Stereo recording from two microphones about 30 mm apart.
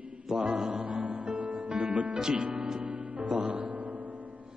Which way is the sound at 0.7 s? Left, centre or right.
Right.